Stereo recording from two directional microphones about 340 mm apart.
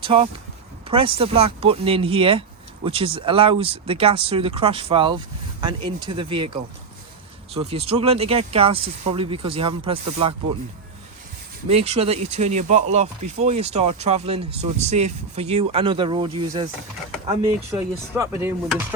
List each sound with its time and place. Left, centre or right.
0.0 s speech: centre
11.7 s speech: centre